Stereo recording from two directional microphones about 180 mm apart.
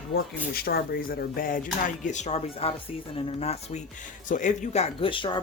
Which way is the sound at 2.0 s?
40° left (ahead or behind).